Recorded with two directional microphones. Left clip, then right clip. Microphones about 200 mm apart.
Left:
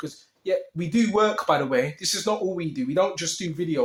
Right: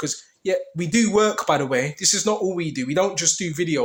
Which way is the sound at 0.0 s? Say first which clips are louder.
Right 6 dB; 40° right (ahead or behind).